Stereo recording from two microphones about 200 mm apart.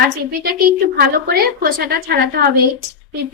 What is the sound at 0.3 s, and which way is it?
A woman's voice, 50° right (ahead or behind).